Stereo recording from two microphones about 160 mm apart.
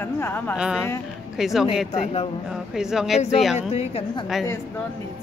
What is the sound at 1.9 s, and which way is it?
Speech, 40° left (ahead or behind).